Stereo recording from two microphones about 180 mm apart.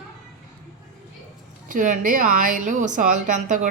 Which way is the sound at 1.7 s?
45° right (ahead or behind).